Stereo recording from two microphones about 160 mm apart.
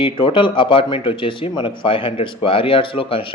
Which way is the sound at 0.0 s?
35° left (ahead or behind).